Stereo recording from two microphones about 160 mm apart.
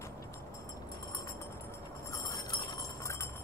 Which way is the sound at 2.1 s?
20° left (ahead or behind).